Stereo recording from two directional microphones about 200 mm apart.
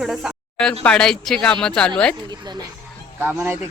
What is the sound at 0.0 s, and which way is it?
Speech, centre (ahead or behind).